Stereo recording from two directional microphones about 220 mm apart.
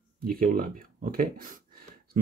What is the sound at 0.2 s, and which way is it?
Speech, 40° right (ahead or behind).